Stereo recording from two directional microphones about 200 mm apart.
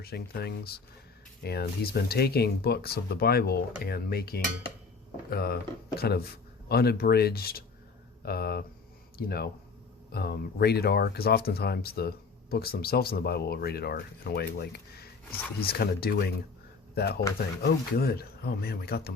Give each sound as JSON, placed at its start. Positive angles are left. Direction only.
{"t": 0.0, "sound": "speech", "side_deg": 50}